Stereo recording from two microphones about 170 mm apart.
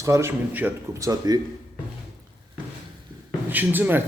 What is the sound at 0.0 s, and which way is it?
A man's voice, 15° right (ahead or behind).